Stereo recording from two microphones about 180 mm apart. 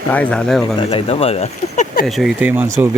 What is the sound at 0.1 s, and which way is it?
Speech, 5° left (ahead or behind).